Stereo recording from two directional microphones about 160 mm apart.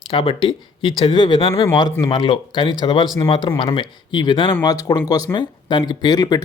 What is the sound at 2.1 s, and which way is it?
Speech, 30° left (ahead or behind).